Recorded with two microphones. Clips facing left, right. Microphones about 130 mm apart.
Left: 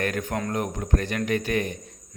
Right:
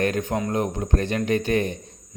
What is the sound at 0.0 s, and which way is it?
Speech, 25° right (ahead or behind).